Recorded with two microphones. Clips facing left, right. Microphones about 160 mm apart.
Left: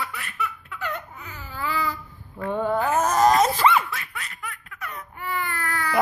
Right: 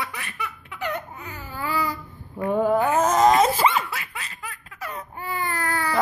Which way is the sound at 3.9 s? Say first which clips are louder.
Right 1 dB; 30° right (ahead or behind).